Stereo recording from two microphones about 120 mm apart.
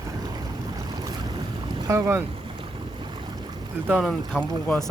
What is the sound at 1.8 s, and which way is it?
Speech, 25° right (ahead or behind).